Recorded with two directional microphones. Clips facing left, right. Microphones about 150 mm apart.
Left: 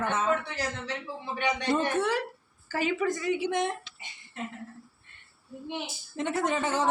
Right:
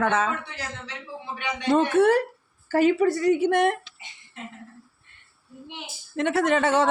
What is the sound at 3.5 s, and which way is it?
Speech, 65° right (ahead or behind).